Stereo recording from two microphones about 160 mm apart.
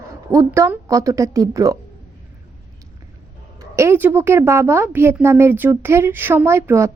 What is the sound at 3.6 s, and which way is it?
A woman's voice, 20° right (ahead or behind).